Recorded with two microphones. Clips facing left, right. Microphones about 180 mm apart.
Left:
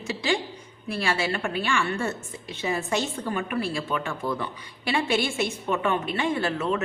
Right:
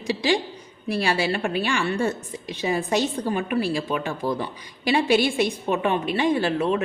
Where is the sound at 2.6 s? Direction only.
35° right (ahead or behind).